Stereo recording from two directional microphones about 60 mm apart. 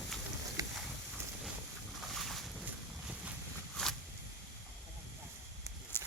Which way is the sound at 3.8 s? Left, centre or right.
Centre.